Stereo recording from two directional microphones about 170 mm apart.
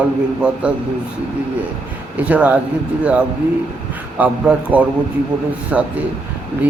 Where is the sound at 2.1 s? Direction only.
10° right (ahead or behind).